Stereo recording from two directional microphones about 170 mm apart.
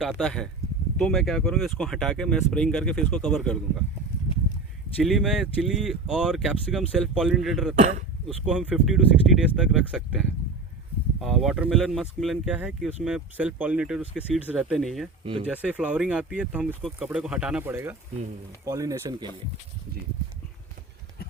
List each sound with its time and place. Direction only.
0.0 s speech: centre (ahead or behind)
5.0 s speech: centre (ahead or behind)
7.8 s speech: 45° right (ahead or behind)
8.4 s speech: 5° right (ahead or behind)
15.2 s speech: 30° right (ahead or behind)
15.4 s speech: 5° right (ahead or behind)